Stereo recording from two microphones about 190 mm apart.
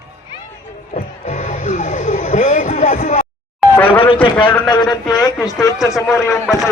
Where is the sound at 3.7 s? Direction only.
10° left (ahead or behind).